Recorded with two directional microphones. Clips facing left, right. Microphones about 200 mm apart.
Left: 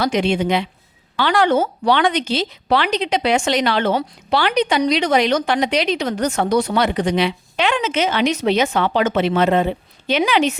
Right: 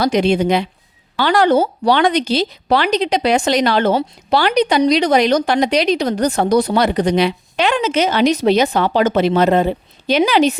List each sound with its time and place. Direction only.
0.0 s a woman's voice: 40° right (ahead or behind)